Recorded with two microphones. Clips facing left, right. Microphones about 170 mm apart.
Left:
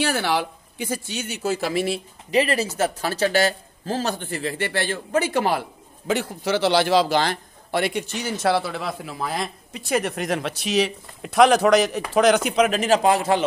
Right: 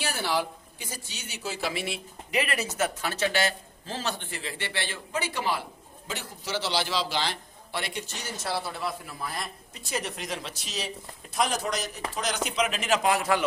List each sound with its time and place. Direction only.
0.0 s a man's voice: 75° left (ahead or behind)
12.1 s speech: 65° left (ahead or behind); by 13.4 s 30° left (ahead or behind)